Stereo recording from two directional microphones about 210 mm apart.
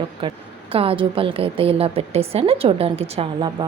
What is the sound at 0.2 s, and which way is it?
A woman's voice, 25° right (ahead or behind).